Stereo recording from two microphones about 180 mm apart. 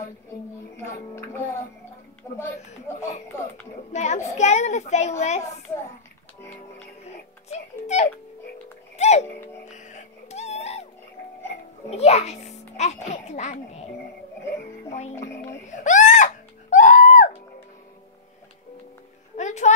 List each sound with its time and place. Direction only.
0.7 s speech: 15° left (ahead or behind)
2.9 s speech: 15° left (ahead or behind)
3.9 s a child's voice: 40° left (ahead or behind)
7.4 s a child's voice: 40° left (ahead or behind)
8.9 s music: 40° left (ahead or behind)
11.9 s a child's voice: 35° left (ahead or behind)
15.8 s speech: 45° left (ahead or behind)
16.7 s a sound: 45° left (ahead or behind)
19.3 s a child's voice: 40° left (ahead or behind)